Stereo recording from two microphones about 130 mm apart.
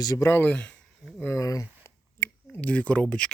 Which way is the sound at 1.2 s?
20° left (ahead or behind).